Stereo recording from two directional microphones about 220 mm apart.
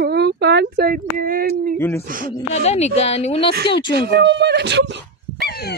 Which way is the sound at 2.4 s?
30° left (ahead or behind).